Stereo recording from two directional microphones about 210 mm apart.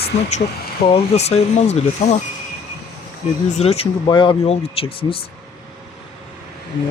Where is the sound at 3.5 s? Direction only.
30° left (ahead or behind).